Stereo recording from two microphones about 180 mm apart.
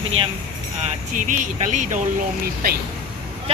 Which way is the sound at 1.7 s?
45° right (ahead or behind).